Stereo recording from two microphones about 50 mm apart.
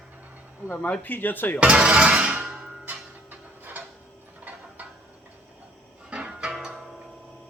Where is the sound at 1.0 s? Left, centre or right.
Left.